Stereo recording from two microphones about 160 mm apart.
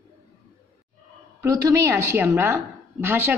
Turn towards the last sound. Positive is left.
turn(degrees=-10)  # may be behind; listen again after turning